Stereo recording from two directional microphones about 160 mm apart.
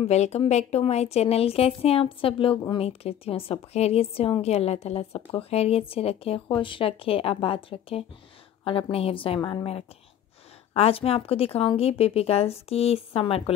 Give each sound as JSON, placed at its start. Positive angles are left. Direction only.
{"t": 0.0, "sound": "a woman's voice", "side_deg": 40}
{"t": 10.7, "sound": "a woman's voice", "side_deg": 35}